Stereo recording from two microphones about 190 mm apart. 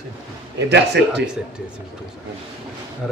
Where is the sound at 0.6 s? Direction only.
65° right (ahead or behind).